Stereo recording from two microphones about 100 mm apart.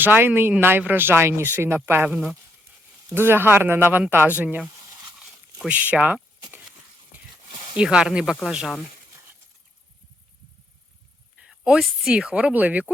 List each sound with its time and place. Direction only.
0.0 s speech: 20° right (ahead or behind)
2.0 s speech: 5° right (ahead or behind)
3.2 s speech: 25° right (ahead or behind)
5.2 s a sound: 10° right (ahead or behind)
7.8 s speech: 10° right (ahead or behind)
11.3 s speech: 5° right (ahead or behind)